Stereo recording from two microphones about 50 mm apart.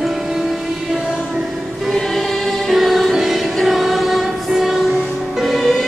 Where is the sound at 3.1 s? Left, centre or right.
Centre.